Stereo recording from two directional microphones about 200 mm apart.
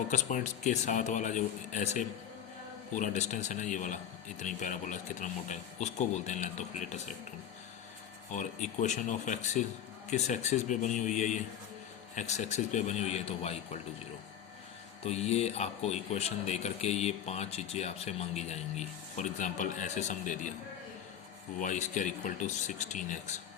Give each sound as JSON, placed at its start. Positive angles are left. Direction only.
{"t": 0.1, "sound": "speech", "side_deg": 40}
{"t": 8.3, "sound": "speech", "side_deg": 40}
{"t": 15.0, "sound": "speech", "side_deg": 35}
{"t": 21.6, "sound": "speech", "side_deg": 40}